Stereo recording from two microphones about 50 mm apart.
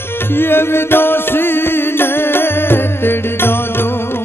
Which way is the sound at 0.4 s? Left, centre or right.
Left.